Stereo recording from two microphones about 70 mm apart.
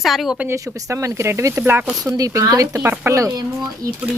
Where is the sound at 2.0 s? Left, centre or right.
Right.